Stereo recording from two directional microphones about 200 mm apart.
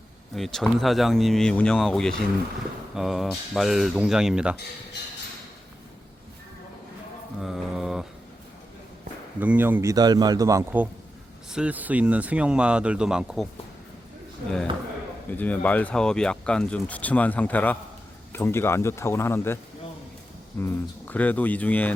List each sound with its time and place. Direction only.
0.3 s speech: centre (ahead or behind)
7.4 s mantra: 5° right (ahead or behind)
9.4 s speech: 10° right (ahead or behind)
15.3 s speech: 10° left (ahead or behind)
20.6 s speech: 10° left (ahead or behind)